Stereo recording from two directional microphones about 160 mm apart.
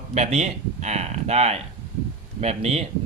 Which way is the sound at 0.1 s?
45° right (ahead or behind).